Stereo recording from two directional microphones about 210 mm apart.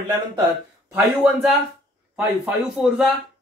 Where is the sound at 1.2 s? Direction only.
Centre (ahead or behind).